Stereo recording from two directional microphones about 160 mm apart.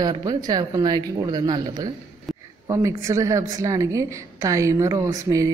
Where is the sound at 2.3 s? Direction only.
Centre (ahead or behind).